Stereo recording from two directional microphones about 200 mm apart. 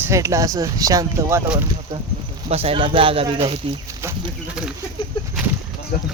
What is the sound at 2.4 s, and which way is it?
Speech, 30° right (ahead or behind).